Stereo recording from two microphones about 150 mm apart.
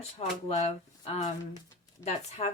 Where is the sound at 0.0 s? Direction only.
45° left (ahead or behind).